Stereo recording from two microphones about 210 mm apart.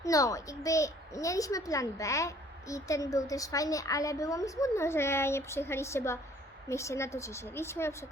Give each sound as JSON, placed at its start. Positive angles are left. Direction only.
{"t": 0.0, "sound": "a child's voice", "side_deg": 15}